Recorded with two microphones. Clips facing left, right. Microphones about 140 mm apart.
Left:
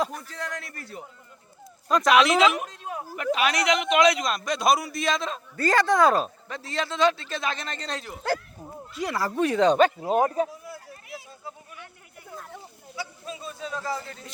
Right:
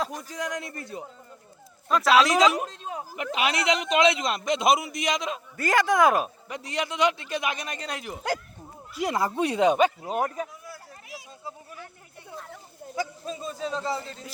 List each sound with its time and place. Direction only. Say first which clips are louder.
0.2 s a man's voice: right 3 dB; 15° right (ahead or behind)
1.9 s speech: left 1 dB; 5° right (ahead or behind)
2.2 s a woman's voice: even; 35° right (ahead or behind); by 9.9 s 10° right (ahead or behind)
10.0 s speech: left 6 dB; 30° left (ahead or behind)
13.0 s a sound: right 4 dB; 40° right (ahead or behind); by 14.2 s 25° right (ahead or behind)